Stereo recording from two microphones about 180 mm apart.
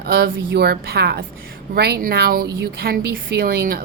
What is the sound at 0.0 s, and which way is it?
A woman's voice, 60° right (ahead or behind).